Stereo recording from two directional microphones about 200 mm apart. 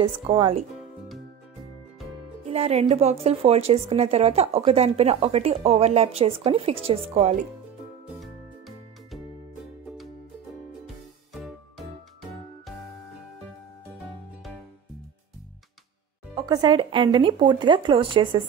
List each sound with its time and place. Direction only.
0.0 s speech: 25° right (ahead or behind)
2.5 s speech: 30° right (ahead or behind)
8.2 s music: centre (ahead or behind)
16.3 s speech: 20° right (ahead or behind)